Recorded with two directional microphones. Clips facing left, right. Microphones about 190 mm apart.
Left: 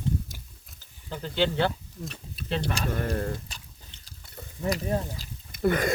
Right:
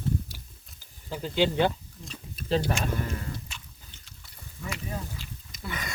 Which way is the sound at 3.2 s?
50° left (ahead or behind).